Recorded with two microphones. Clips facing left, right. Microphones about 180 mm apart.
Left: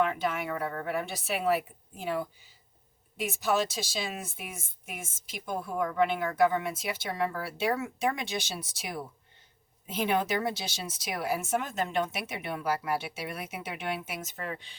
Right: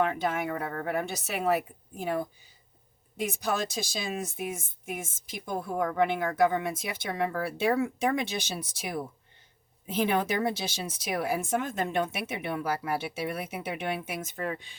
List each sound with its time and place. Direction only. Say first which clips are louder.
0.0 s a woman's voice: right 1 dB; 50° right (ahead or behind)
3.6 s a woman's voice: left 1 dB; 50° right (ahead or behind)
5.5 s a woman's voice: right 2 dB; 50° right (ahead or behind)